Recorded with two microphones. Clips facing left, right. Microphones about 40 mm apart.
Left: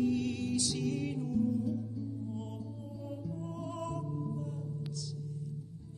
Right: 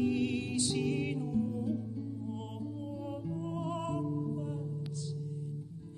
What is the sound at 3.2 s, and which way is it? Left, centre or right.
Music, right.